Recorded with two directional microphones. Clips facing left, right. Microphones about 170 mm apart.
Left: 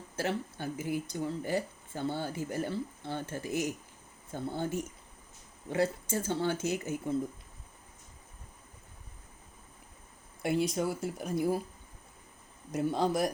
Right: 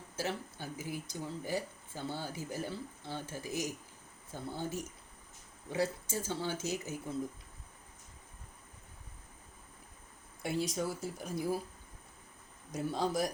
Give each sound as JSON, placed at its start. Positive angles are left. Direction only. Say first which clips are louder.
{"t": 0.2, "sound": "speech", "louder": "left 5 dB", "side_deg": 60}
{"t": 10.4, "sound": "speech", "louder": "left 5 dB", "side_deg": 60}
{"t": 12.7, "sound": "speech", "louder": "left 4 dB", "side_deg": 65}